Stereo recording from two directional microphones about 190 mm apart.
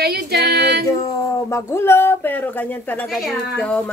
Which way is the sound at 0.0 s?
55° right (ahead or behind).